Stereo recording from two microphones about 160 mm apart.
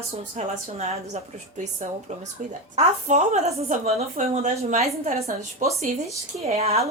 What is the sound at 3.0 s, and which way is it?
A woman's voice, 45° right (ahead or behind).